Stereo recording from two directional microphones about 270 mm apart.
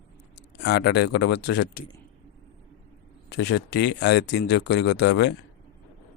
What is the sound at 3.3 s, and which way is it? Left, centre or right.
Speech, left.